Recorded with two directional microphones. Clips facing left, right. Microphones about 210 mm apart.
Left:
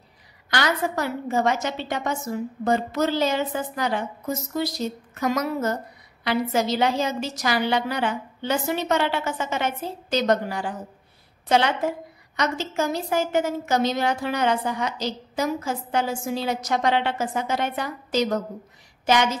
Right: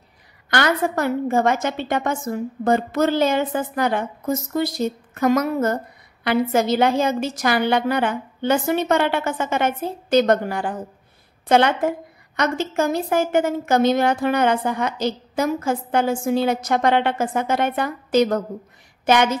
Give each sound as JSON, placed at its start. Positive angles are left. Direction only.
{"t": 0.5, "sound": "a woman's voice", "side_deg": -55}